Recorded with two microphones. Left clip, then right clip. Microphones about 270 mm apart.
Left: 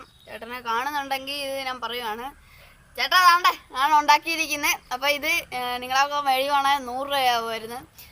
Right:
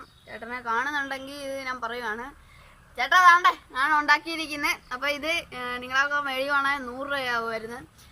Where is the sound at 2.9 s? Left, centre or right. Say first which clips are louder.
Even; centre.